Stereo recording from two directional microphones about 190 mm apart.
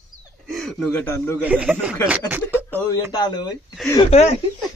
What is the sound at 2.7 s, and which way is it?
Speech, 15° left (ahead or behind).